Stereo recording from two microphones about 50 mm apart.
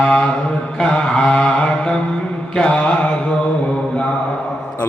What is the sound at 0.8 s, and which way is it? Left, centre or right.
Mantra, centre.